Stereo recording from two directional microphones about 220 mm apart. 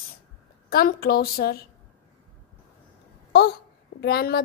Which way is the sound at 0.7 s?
45° left (ahead or behind).